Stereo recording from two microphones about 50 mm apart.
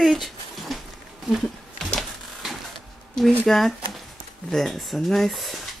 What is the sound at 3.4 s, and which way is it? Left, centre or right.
Speech, centre.